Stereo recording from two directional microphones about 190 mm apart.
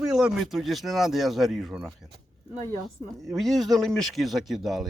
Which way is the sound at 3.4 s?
Centre (ahead or behind).